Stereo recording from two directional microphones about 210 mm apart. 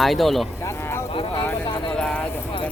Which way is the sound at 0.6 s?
10° left (ahead or behind).